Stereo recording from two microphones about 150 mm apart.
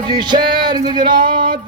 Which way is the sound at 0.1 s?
30° right (ahead or behind).